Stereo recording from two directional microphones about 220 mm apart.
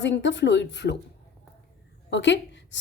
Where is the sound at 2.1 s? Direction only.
55° left (ahead or behind).